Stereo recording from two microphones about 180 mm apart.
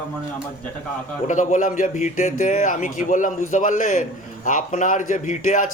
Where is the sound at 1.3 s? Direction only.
45° left (ahead or behind).